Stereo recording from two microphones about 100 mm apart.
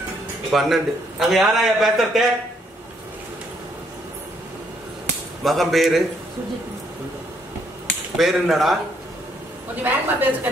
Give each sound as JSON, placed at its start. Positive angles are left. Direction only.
{"t": 0.5, "sound": "a man's voice", "side_deg": 0}
{"t": 5.4, "sound": "a man's voice", "side_deg": 0}
{"t": 8.2, "sound": "a man's voice", "side_deg": 0}
{"t": 9.8, "sound": "a woman's voice", "side_deg": -20}